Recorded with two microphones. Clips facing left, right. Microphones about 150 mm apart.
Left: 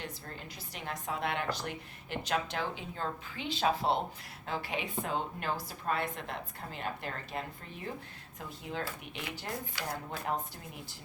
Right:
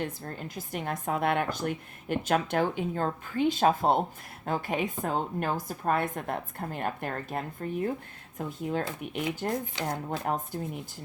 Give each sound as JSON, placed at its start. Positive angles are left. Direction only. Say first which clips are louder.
{"t": 0.0, "sound": "speech", "louder": "right 8 dB", "side_deg": -50}